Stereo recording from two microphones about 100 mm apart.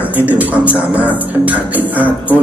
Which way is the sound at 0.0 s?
15° right (ahead or behind).